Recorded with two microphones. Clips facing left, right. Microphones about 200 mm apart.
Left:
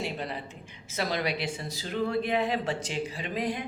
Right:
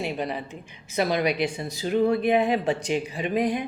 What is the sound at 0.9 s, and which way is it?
A woman's voice, 15° right (ahead or behind).